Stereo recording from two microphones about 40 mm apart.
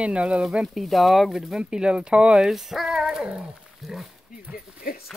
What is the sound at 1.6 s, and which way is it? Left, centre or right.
Speech, right.